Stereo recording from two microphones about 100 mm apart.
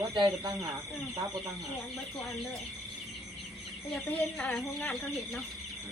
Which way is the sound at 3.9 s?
10° left (ahead or behind).